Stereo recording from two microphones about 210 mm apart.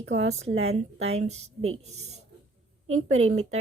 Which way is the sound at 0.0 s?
65° right (ahead or behind).